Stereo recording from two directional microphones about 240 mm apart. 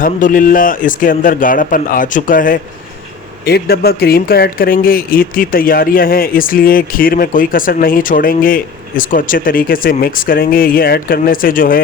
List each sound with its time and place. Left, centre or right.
0.0 s speech: left